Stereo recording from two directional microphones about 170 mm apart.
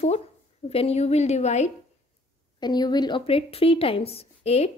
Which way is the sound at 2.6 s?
25° left (ahead or behind).